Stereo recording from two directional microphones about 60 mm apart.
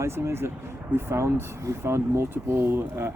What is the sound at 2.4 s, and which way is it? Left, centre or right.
Speech, right.